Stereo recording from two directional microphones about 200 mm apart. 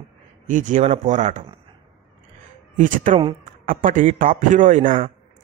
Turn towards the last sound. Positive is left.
turn(degrees=-40)  # may be behind; listen again after turning